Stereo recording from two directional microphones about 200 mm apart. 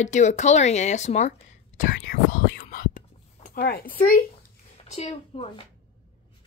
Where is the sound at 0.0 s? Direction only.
35° left (ahead or behind).